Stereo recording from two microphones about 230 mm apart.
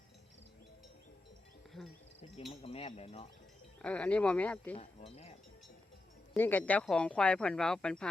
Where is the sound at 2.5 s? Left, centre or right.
Left.